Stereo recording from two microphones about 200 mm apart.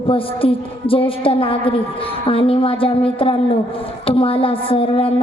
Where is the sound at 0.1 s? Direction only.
25° left (ahead or behind).